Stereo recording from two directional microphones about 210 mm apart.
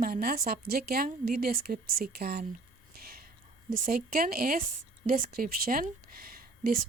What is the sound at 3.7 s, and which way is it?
Speech, 40° right (ahead or behind).